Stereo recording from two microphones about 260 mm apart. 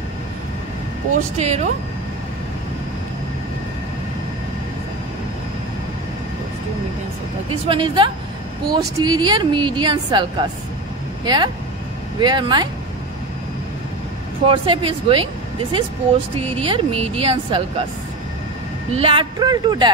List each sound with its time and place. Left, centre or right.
1.1 s a woman's voice: right
7.6 s a woman's voice: centre
11.2 s a woman's voice: centre
14.4 s a woman's voice: centre
16.3 s a woman's voice: right
18.9 s a woman's voice: centre